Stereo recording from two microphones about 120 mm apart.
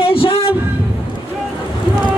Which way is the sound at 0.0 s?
50° left (ahead or behind).